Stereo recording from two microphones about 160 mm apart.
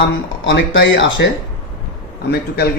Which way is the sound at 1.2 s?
90° left.